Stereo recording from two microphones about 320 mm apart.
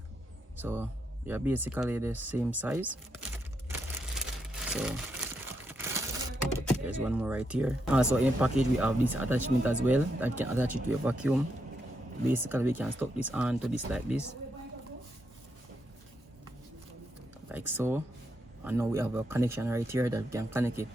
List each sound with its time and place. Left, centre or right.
0.6 s speech: centre
3.7 s crumpling: centre
6.8 s speech: centre
17.5 s speech: centre